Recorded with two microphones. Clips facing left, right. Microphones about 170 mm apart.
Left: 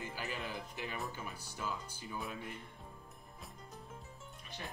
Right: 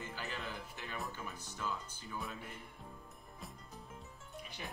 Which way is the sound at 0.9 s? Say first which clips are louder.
Left 1 dB; 5° left (ahead or behind).